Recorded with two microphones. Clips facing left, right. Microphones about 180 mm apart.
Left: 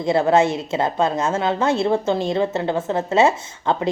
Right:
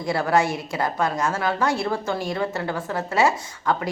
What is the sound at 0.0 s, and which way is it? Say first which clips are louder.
A woman's voice: left 5 dB; 25° left (ahead or behind).